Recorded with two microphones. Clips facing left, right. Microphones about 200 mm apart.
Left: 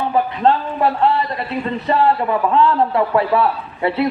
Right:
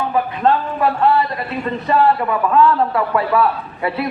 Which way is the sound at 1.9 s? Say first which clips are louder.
Right 1 dB; 25° left (ahead or behind).